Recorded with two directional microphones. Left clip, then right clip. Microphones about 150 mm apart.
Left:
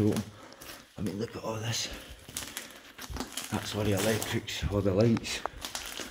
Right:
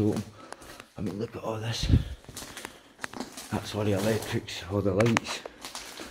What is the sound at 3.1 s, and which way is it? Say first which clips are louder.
Speech: left 2 dB; 5° right (ahead or behind).